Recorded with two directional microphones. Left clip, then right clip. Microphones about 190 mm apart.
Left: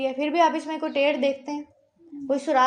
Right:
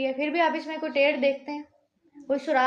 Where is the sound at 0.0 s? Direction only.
35° left (ahead or behind).